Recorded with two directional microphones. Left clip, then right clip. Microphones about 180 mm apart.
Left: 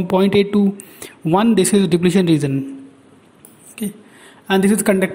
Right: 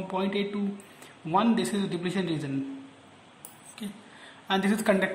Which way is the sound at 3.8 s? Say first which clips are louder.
Left 12 dB; 35° left (ahead or behind).